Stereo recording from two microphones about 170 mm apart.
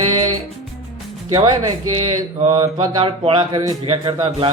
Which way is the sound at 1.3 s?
25° right (ahead or behind).